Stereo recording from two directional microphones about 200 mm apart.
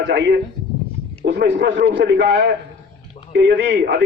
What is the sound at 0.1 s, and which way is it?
A man's voice, 60° right (ahead or behind).